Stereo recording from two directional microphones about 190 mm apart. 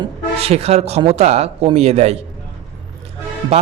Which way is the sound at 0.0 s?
30° right (ahead or behind).